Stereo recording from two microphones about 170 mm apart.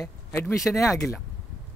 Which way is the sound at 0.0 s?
15° left (ahead or behind).